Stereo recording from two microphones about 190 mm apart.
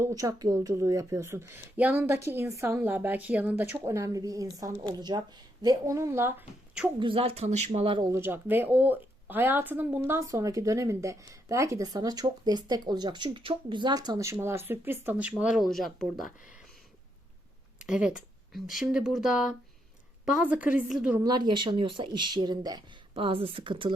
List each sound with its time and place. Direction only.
0.0 s a woman's voice: 20° right (ahead or behind)
7.0 s speech: 30° right (ahead or behind)
8.1 s a woman's voice: 10° right (ahead or behind)
17.8 s a woman's voice: 5° right (ahead or behind)
21.2 s speech: 25° right (ahead or behind)